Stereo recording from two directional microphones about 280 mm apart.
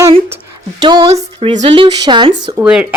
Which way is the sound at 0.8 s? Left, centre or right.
Centre.